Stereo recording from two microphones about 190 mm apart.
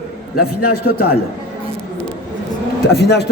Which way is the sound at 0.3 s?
55° left (ahead or behind).